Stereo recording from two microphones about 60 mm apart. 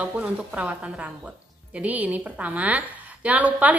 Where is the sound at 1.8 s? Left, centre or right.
Right.